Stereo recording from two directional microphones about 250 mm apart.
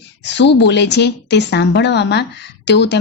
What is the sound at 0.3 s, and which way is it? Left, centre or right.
A woman's voice, left.